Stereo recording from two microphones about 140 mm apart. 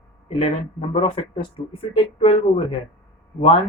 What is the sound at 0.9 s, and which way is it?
Speech, 45° left (ahead or behind).